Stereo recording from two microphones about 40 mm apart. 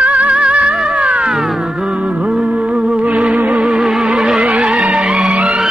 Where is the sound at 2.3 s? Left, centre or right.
Right.